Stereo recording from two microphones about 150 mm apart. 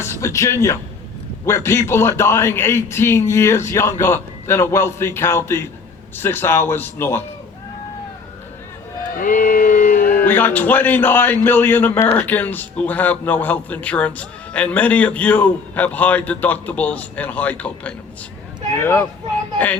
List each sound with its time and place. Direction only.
0.0 s a sound: 20° left (ahead or behind)
0.5 s a man's voice: 20° left (ahead or behind)
9.2 s music: 65° left (ahead or behind)
10.2 s a man's voice: 10° left (ahead or behind)
18.8 s a man's voice: 15° left (ahead or behind)